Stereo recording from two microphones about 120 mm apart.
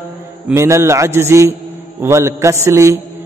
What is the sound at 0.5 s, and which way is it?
Mantra, 25° right (ahead or behind).